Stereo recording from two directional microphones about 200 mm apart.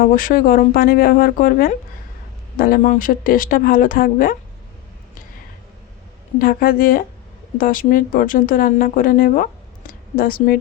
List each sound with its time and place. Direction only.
0.0 s speech: 45° left (ahead or behind)
6.4 s speech: 45° left (ahead or behind)